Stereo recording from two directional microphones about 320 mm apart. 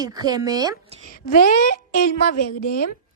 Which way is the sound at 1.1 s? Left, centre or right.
Left.